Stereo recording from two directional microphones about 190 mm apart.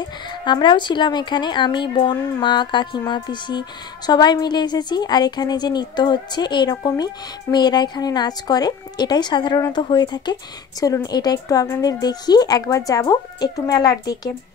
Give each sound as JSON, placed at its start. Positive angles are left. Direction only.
{"t": 0.5, "sound": "speech", "side_deg": 25}